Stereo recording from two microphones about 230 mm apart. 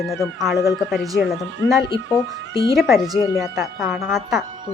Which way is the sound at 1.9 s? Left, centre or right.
Left.